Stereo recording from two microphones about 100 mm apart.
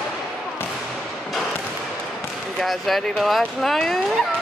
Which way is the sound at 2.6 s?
Centre (ahead or behind).